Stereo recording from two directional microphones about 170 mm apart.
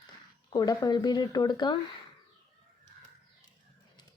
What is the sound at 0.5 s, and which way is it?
Speech, 20° left (ahead or behind).